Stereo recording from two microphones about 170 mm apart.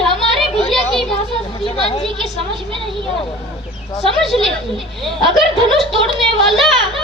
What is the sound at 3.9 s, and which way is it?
A child's voice, centre (ahead or behind).